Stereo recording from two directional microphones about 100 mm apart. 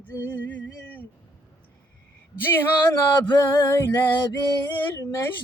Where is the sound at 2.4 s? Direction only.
25° left (ahead or behind).